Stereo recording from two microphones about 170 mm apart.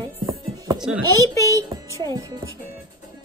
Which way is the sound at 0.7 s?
5° right (ahead or behind).